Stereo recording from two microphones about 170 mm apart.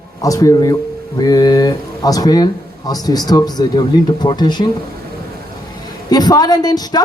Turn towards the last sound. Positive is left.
turn(degrees=25)  # may be behind; listen again after turning